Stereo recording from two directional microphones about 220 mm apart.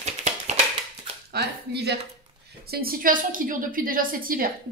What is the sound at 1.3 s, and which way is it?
A woman's voice, 45° right (ahead or behind).